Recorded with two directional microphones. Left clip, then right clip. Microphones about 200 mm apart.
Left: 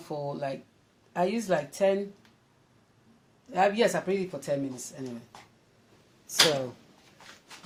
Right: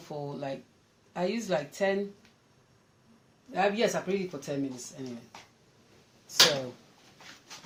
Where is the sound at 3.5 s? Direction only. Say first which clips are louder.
Left 3 dB; 40° left (ahead or behind).